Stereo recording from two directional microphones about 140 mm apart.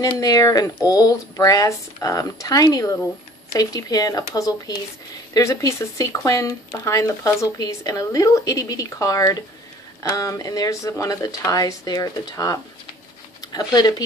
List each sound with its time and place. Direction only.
0.0 s speech: 25° left (ahead or behind)